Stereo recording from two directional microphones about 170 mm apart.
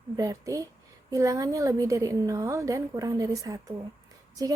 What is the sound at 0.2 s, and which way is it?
A woman's voice, 20° right (ahead or behind).